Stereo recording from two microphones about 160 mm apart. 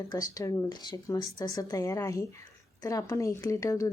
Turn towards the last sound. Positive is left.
turn(degrees=20)  # may be behind; listen again after turning